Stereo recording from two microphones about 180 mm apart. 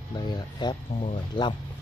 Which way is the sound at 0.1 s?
25° left (ahead or behind).